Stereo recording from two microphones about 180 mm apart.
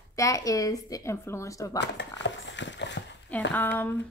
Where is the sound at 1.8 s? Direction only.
80° left.